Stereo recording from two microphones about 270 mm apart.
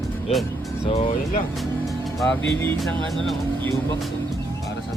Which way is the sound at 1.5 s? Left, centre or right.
Centre.